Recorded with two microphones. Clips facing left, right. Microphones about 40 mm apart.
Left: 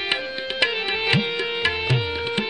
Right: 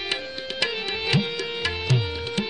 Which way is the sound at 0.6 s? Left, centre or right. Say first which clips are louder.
Left 4 dB; left.